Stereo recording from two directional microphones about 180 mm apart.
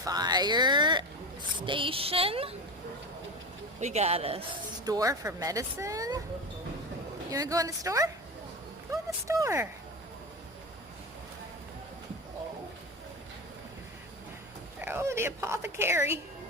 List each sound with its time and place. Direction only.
0.0 s a sound: 20° right (ahead or behind)
1.6 s a woman's voice: 30° right (ahead or behind)
3.8 s a woman's voice: 35° right (ahead or behind)
4.9 s speech: 20° right (ahead or behind)
7.3 s speech: 20° right (ahead or behind)
14.8 s speech: 10° right (ahead or behind)